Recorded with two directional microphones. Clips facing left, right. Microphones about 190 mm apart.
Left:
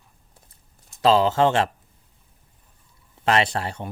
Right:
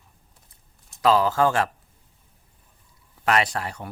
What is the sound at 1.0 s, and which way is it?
Speech, 25° left (ahead or behind).